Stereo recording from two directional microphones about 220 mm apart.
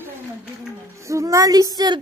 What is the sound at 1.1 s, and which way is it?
Child singing, 15° right (ahead or behind).